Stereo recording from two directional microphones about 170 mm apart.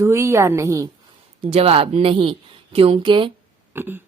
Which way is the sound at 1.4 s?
35° right (ahead or behind).